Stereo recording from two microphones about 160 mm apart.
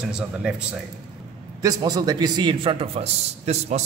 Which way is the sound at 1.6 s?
25° right (ahead or behind).